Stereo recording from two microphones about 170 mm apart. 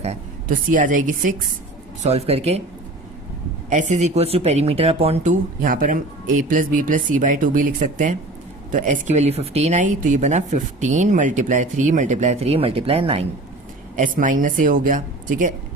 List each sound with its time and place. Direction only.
0.0 s a woman's voice: 45° right (ahead or behind)
2.0 s speech: 35° right (ahead or behind)
3.7 s speech: 45° right (ahead or behind)
13.9 s speech: 50° right (ahead or behind)